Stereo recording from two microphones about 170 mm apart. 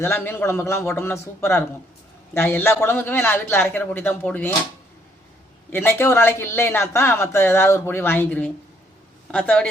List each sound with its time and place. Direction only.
0.0 s speech: 15° left (ahead or behind)
5.7 s speech: 15° left (ahead or behind)